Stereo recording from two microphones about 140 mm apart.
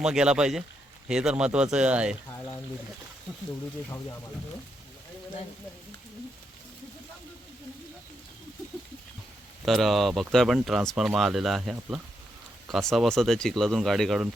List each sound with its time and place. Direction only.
0.0 s speech: 5° right (ahead or behind)
9.6 s speech: centre (ahead or behind)